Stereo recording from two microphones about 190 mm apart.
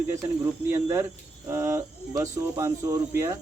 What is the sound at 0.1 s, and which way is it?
Speech, 15° right (ahead or behind).